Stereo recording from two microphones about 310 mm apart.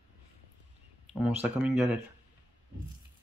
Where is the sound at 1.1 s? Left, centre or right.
Centre.